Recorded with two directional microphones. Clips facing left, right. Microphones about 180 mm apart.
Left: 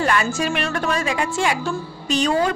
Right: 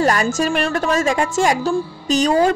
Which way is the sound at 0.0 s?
40° right (ahead or behind).